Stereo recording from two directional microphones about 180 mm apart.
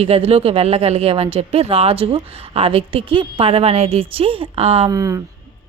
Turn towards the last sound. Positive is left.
turn(degrees=-20)  # may be behind; listen again after turning